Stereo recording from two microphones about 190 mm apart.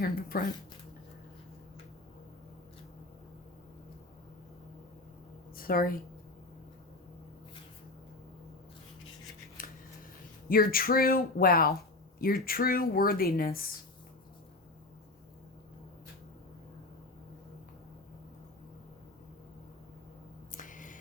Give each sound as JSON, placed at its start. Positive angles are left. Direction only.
{"t": 0.0, "sound": "speech", "side_deg": 50}
{"t": 5.5, "sound": "a woman's voice", "side_deg": 50}
{"t": 9.6, "sound": "scissors", "side_deg": 45}
{"t": 10.5, "sound": "speech", "side_deg": 50}
{"t": 20.5, "sound": "a sound", "side_deg": 45}